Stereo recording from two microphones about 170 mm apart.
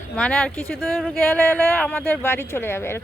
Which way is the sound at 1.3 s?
10° left (ahead or behind).